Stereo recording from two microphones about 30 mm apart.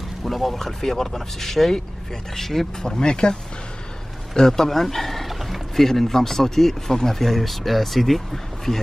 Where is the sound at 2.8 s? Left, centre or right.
Left.